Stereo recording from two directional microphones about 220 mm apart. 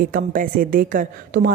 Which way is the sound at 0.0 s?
40° right (ahead or behind).